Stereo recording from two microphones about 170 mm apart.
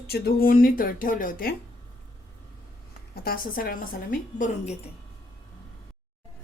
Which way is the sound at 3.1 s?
60° left (ahead or behind).